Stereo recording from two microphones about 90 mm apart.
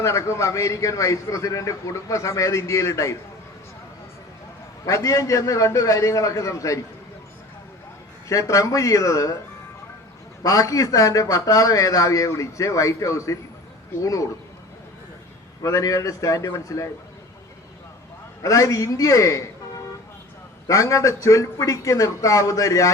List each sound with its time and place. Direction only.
0.0 s a man's voice: 35° left (ahead or behind)
4.9 s a man's voice: 35° left (ahead or behind)
8.3 s a man's voice: 35° left (ahead or behind)
10.4 s a man's voice: 40° left (ahead or behind)
15.6 s a man's voice: 40° left (ahead or behind)
18.4 s a man's voice: 35° left (ahead or behind)
20.7 s a man's voice: 35° left (ahead or behind)